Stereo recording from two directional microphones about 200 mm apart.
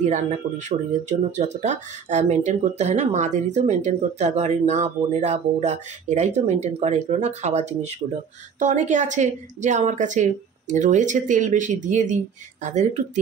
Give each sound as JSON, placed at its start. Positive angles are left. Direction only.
{"t": 0.0, "sound": "speech", "side_deg": -35}